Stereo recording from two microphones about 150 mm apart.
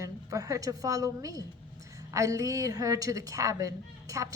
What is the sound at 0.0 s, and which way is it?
A woman's voice, 25° right (ahead or behind).